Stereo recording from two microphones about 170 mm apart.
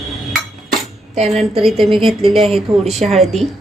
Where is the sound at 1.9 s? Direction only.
Centre (ahead or behind).